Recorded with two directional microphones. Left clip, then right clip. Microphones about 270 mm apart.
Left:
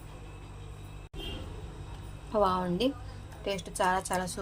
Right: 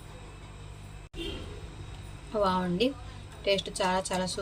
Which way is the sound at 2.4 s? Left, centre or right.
Centre.